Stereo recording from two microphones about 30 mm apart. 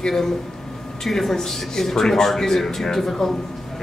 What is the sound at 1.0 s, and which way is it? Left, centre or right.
Speech, centre.